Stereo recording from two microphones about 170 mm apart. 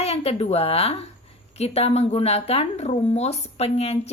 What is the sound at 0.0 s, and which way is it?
Speech, 35° left (ahead or behind).